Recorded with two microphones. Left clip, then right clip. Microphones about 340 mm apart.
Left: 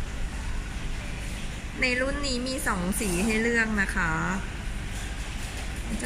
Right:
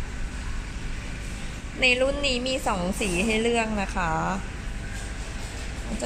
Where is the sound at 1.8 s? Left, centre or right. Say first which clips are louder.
Right 5 dB; centre.